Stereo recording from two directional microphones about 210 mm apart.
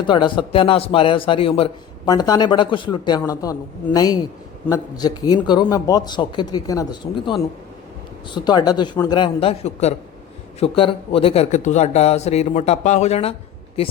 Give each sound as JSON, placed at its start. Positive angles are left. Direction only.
{"t": 0.1, "sound": "a man's voice", "side_deg": 20}